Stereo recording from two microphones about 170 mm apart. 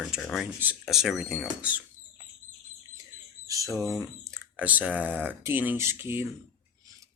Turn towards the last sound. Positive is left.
turn(degrees=-15)  # may be behind; listen again after turning